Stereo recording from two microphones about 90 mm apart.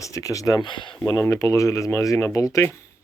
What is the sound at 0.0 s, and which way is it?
Speech, 40° left (ahead or behind).